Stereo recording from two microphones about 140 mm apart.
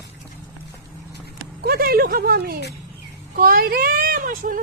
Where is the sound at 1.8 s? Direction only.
90° right.